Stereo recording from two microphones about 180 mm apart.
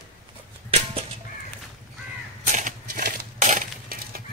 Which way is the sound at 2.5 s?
50° right (ahead or behind).